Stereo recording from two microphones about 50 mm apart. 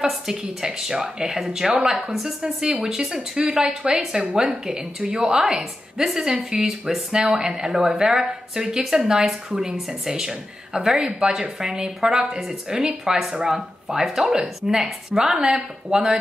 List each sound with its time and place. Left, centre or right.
0.0 s a woman's voice: centre